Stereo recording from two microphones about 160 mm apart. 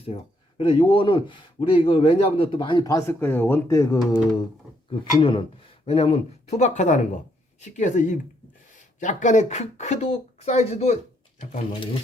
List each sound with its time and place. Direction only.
0.0 s speech: 40° left (ahead or behind); by 4.2 s 20° left (ahead or behind)
4.9 s speech: 35° left (ahead or behind)